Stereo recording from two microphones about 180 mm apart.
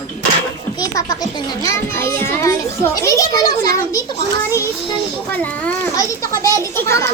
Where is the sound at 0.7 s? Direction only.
20° left (ahead or behind).